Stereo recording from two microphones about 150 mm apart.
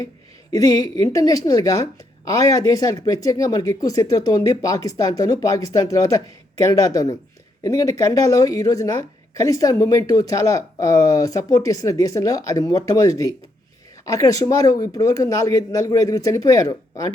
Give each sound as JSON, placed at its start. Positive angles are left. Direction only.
{"t": 0.5, "sound": "a woman's voice", "side_deg": 25}